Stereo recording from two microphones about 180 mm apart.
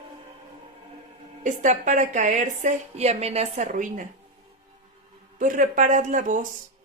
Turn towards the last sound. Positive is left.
turn(degrees=-50)  # may be behind; listen again after turning